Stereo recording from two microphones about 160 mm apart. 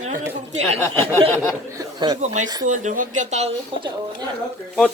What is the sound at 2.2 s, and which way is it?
Speech, 50° right (ahead or behind).